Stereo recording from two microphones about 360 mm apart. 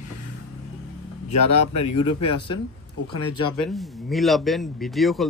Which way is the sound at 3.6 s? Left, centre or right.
Centre.